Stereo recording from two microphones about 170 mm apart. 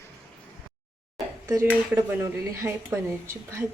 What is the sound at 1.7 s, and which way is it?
Speech, 15° right (ahead or behind).